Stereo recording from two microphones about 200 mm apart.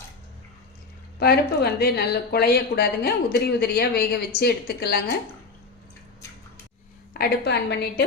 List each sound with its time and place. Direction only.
1.2 s speech: 50° left (ahead or behind)
7.1 s a woman's voice: 55° left (ahead or behind)